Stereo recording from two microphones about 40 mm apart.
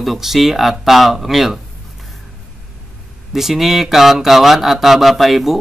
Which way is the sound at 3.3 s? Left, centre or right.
Centre.